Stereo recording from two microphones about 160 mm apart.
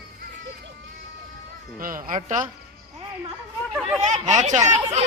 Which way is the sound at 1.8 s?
60° right (ahead or behind).